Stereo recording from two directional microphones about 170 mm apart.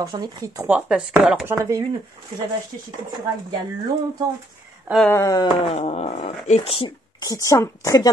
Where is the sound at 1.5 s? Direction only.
15° right (ahead or behind).